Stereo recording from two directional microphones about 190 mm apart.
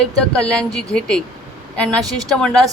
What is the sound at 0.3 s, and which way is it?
A woman's voice, 5° left (ahead or behind).